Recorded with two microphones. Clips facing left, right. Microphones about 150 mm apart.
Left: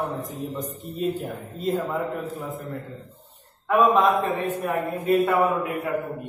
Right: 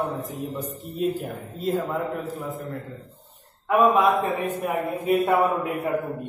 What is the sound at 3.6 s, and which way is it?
A man's voice, 10° right (ahead or behind).